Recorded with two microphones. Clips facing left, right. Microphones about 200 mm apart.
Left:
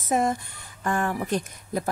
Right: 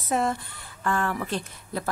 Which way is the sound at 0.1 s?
15° left (ahead or behind).